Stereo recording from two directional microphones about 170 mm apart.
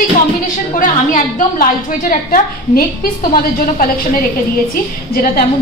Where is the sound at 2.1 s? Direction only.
60° left (ahead or behind).